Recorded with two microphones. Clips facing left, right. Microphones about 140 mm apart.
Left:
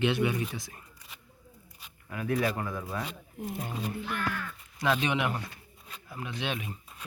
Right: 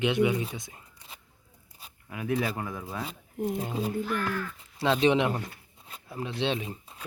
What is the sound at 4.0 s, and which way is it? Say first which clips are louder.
Speech: right 4 dB; 40° right (ahead or behind).